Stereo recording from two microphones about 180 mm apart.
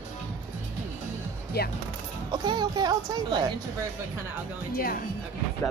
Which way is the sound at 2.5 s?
25° right (ahead or behind).